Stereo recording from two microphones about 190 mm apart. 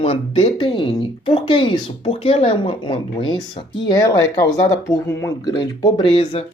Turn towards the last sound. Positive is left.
turn(degrees=25)  # may be behind; listen again after turning